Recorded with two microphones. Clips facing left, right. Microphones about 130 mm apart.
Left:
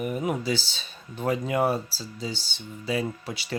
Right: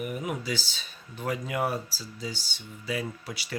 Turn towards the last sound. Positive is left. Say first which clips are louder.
# left 4 dB
turn(degrees=25)  # may be behind; listen again after turning